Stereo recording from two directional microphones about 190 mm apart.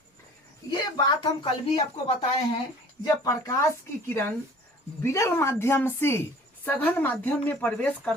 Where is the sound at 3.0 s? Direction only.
15° left (ahead or behind).